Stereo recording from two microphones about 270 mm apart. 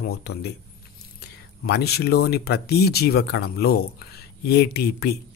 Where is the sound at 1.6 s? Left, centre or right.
Left.